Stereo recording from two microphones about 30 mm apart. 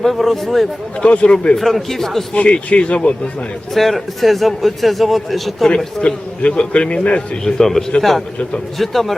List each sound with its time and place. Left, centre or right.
0.0 s a man's voice: centre
1.0 s a man's voice: left
1.5 s speech: centre
2.3 s speech: left
3.8 s a man's voice: centre
5.6 s a man's voice: left
7.4 s a man's voice: centre